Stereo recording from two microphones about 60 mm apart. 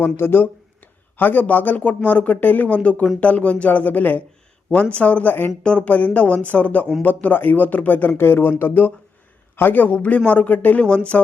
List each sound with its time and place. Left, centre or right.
0.0 s speech: left
5.6 s a man's voice: centre
10.8 s speech: centre